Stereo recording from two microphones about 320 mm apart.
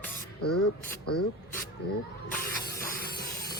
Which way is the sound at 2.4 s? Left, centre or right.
Left.